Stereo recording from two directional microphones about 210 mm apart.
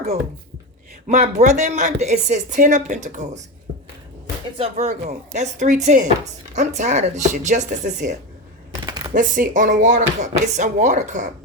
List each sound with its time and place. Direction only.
1.0 s speech: 35° right (ahead or behind)
4.5 s speech: 25° right (ahead or behind)
8.9 s a sound: 20° right (ahead or behind)
9.1 s speech: 40° right (ahead or behind)